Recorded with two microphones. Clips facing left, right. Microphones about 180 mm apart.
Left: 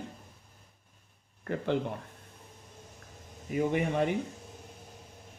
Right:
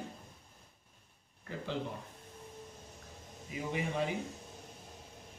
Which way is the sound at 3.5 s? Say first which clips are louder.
Left 8 dB; 60° left (ahead or behind).